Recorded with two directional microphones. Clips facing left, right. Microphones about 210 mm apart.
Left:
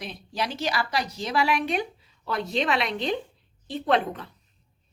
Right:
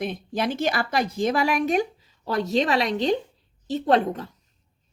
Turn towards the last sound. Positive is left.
turn(degrees=-40)  # may be behind; listen again after turning